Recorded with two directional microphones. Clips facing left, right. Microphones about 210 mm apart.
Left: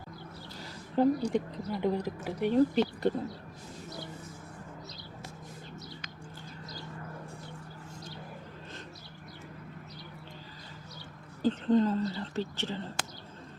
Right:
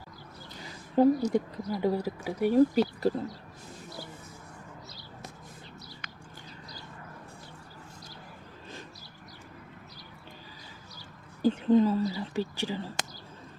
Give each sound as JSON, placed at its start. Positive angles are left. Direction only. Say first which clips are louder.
{"t": 0.6, "sound": "a woman's voice", "louder": "right 4 dB", "side_deg": -10}
{"t": 11.4, "sound": "speech", "louder": "right 3 dB", "side_deg": -10}